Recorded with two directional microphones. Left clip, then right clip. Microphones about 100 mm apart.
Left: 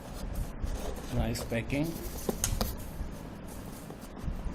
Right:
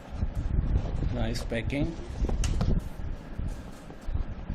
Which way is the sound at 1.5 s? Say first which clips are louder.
Right 2 dB; 40° right (ahead or behind).